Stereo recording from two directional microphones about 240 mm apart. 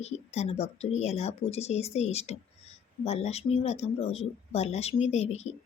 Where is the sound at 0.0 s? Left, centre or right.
Left.